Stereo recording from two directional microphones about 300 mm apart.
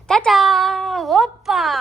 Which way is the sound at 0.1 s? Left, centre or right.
Centre.